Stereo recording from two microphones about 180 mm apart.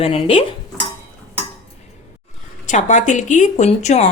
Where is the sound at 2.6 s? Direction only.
45° left (ahead or behind).